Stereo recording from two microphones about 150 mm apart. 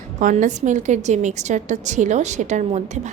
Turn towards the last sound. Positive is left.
turn(degrees=-50)  # may be behind; listen again after turning